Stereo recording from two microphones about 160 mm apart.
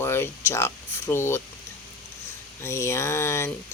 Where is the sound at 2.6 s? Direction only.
15° left (ahead or behind).